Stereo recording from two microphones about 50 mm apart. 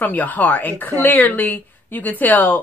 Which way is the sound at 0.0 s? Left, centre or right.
Left.